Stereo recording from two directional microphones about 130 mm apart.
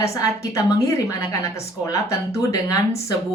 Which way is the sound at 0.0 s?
25° left (ahead or behind).